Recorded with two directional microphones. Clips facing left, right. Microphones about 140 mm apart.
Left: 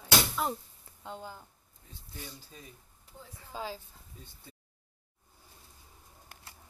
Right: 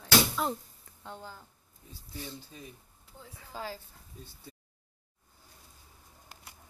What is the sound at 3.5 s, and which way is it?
Speech, 15° left (ahead or behind).